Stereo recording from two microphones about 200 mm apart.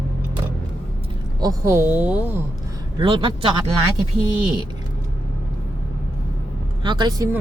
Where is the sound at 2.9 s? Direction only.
25° right (ahead or behind).